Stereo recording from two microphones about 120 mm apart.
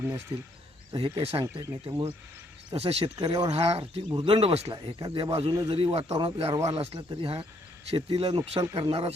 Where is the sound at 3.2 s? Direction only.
45° right (ahead or behind).